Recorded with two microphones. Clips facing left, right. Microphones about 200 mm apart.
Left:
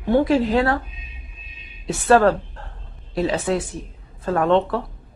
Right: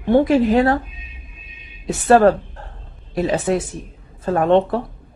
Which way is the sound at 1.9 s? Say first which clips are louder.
Right 3 dB; 15° right (ahead or behind).